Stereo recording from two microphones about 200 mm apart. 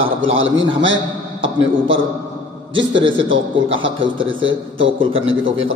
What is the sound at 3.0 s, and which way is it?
Speech, 25° right (ahead or behind).